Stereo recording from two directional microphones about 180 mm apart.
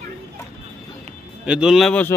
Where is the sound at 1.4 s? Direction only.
5° right (ahead or behind).